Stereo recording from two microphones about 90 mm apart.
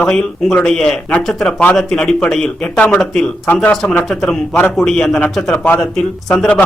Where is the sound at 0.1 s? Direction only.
5° left (ahead or behind).